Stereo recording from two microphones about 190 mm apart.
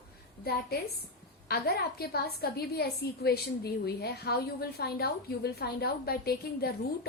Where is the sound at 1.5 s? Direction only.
55° left (ahead or behind).